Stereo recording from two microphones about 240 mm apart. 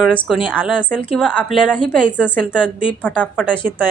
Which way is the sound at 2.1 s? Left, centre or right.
Centre.